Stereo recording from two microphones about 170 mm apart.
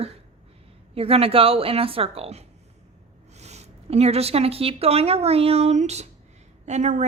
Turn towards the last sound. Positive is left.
turn(degrees=-45)  # may be behind; listen again after turning